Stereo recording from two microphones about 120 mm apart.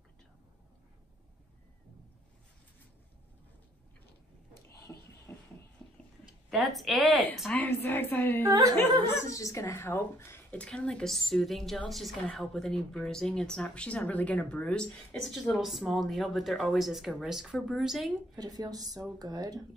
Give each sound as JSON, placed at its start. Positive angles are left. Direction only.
{"t": 5.3, "sound": "a sound", "side_deg": 20}
{"t": 6.5, "sound": "speech", "side_deg": 0}
{"t": 7.5, "sound": "music", "side_deg": 15}
{"t": 8.4, "sound": "a woman's voice", "side_deg": -25}
{"t": 9.1, "sound": "speech", "side_deg": 25}
{"t": 18.3, "sound": "speech", "side_deg": -30}